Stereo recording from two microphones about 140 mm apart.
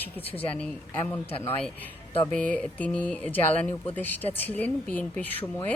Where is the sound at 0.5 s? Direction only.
10° left (ahead or behind).